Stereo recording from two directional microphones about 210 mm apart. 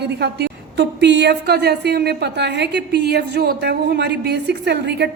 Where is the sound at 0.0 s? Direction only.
50° right (ahead or behind).